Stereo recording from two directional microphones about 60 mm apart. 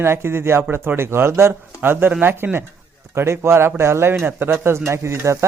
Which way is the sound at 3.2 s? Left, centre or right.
Right.